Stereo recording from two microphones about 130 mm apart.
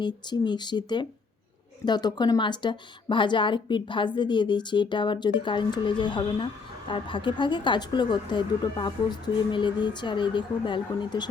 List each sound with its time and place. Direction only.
0.0 s a woman's voice: 35° left (ahead or behind)